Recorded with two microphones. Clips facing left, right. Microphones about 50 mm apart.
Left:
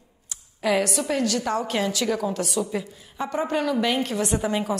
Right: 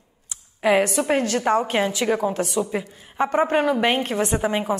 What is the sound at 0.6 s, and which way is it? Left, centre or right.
A woman's voice, right.